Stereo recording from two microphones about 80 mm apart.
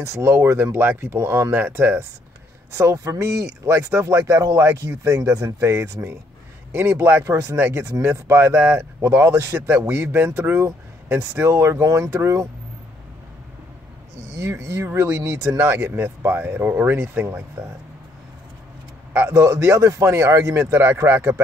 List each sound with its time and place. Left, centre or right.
0.0 s speech: right
2.7 s speech: right
14.3 s speech: right
19.1 s speech: right